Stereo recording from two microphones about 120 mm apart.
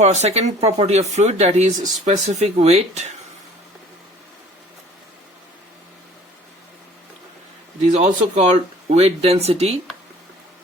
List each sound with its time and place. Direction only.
0.0 s speech: 70° right (ahead or behind)
7.8 s a man's voice: 80° right
8.9 s speech: 60° right (ahead or behind)